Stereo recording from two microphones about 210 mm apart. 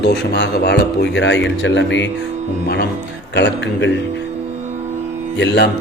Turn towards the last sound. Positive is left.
turn(degrees=55)  # may be behind; listen again after turning